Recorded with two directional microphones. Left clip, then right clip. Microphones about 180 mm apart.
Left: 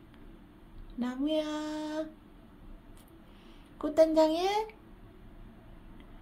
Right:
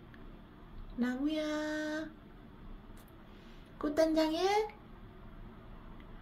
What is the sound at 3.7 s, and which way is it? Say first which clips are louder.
Speech: left 6 dB; 20° left (ahead or behind).